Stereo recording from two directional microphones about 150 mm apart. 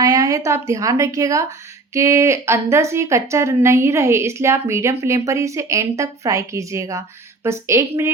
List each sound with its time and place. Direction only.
0.0 s speech: 25° right (ahead or behind)